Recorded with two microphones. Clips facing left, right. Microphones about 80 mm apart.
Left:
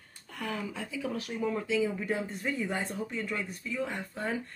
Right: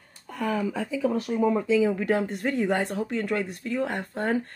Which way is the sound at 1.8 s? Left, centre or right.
Right.